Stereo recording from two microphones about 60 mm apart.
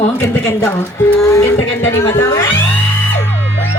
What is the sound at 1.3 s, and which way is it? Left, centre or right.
Speech, left.